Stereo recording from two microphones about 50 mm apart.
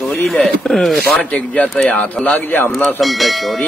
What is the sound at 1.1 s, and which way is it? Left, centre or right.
Speech, left.